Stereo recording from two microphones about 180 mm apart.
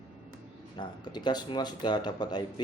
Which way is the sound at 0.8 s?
25° left (ahead or behind).